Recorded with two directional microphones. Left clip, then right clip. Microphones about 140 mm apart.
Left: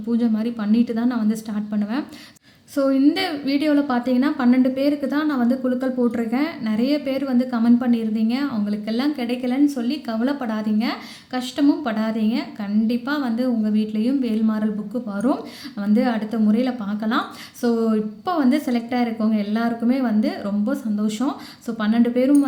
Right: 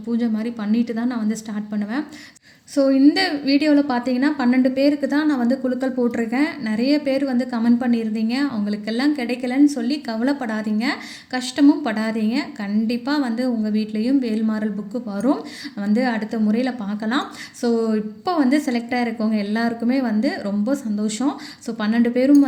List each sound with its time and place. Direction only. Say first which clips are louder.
0.1 s a woman's voice: left 1 dB; 5° right (ahead or behind)
2.7 s a woman's voice: right 3 dB; 25° right (ahead or behind)